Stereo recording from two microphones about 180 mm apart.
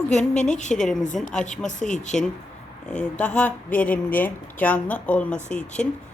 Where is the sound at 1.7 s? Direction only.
45° left (ahead or behind).